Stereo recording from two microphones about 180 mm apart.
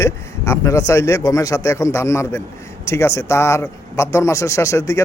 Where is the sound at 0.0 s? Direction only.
15° left (ahead or behind).